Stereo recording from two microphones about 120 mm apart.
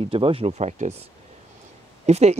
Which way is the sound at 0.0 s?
50° right (ahead or behind).